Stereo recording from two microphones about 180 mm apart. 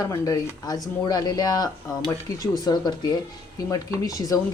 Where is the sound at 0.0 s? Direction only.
20° left (ahead or behind).